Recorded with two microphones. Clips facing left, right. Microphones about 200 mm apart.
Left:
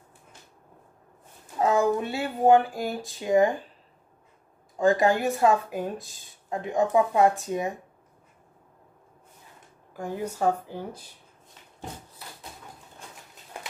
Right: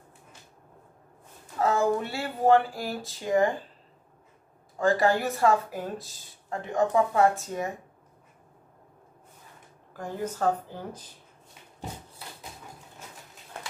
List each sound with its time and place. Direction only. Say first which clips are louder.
1.6 s speech: left 2 dB; 15° left (ahead or behind)
4.7 s speech: left 2 dB; 15° left (ahead or behind)
9.9 s speech: left 1 dB; 10° left (ahead or behind)